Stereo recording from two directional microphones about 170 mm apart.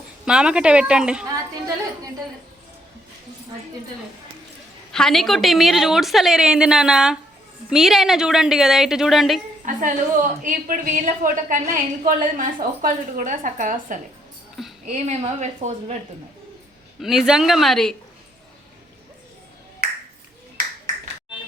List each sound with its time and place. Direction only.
0.3 s a woman's voice: 5° right (ahead or behind)
4.9 s a woman's voice: 5° left (ahead or behind)
9.6 s a woman's voice: 50° right (ahead or behind)
17.0 s a woman's voice: centre (ahead or behind)